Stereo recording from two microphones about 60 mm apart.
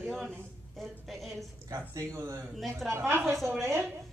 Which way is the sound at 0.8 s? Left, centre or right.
Centre.